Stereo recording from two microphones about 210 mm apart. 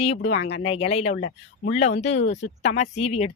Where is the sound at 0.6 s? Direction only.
30° left (ahead or behind).